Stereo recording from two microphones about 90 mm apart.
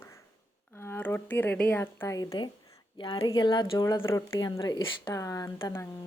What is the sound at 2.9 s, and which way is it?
Speech, 60° left (ahead or behind).